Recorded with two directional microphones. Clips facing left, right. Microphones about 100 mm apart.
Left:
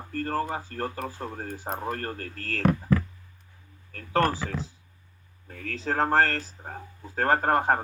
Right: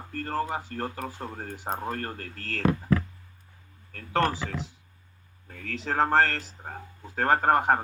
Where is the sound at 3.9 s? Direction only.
45° left (ahead or behind).